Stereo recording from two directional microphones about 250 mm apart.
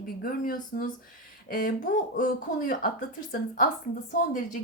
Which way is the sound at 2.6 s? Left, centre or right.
Left.